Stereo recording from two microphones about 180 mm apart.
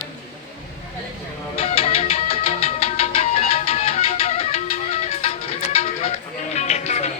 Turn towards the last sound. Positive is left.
turn(degrees=40)  # may be behind; listen again after turning